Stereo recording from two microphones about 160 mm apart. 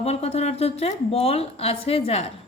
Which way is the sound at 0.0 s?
40° left (ahead or behind).